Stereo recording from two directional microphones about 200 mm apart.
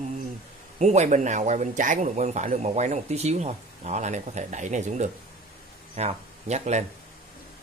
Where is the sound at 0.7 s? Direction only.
35° right (ahead or behind).